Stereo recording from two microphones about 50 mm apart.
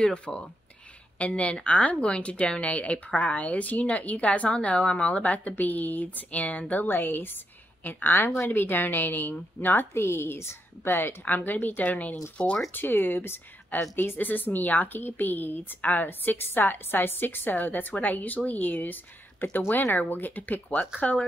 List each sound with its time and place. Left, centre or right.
0.0 s a woman's voice: centre
12.7 s a woman's voice: left